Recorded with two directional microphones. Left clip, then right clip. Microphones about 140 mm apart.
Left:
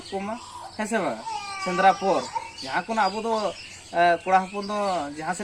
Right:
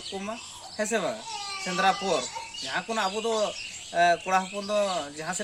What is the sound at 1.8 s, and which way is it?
Speech, 45° right (ahead or behind).